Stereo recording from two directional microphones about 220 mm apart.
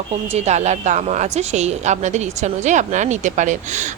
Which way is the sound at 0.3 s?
30° right (ahead or behind).